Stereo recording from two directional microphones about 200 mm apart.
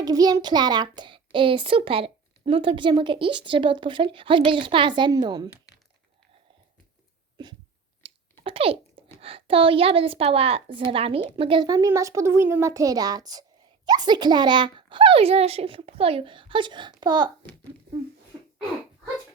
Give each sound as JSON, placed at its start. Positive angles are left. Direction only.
{"t": 0.0, "sound": "a child's voice", "side_deg": -20}
{"t": 8.0, "sound": "a sound", "side_deg": -25}
{"t": 9.2, "sound": "a child's voice", "side_deg": -25}